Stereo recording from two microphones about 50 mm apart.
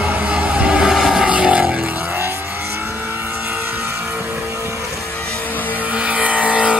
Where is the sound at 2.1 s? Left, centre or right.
Right.